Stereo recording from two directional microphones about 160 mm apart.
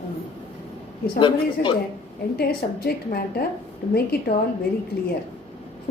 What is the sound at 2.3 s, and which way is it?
A woman's voice, 80° left.